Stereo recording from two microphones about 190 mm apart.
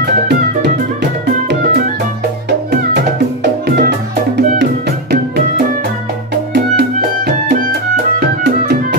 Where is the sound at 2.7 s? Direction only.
55° right (ahead or behind).